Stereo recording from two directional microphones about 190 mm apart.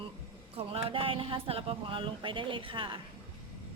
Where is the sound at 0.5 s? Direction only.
30° right (ahead or behind).